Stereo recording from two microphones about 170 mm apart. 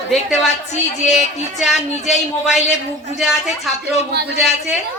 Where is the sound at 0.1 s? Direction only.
Centre (ahead or behind).